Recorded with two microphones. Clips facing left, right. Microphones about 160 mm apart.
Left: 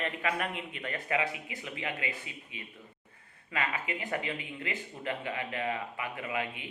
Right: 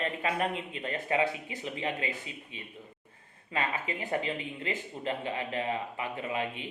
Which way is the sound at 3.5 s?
30° right (ahead or behind).